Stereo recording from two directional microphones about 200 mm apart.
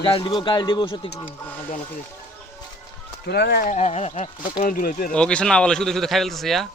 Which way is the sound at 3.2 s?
55° left (ahead or behind).